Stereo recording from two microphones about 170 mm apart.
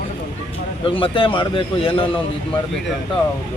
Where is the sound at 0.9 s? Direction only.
30° left (ahead or behind).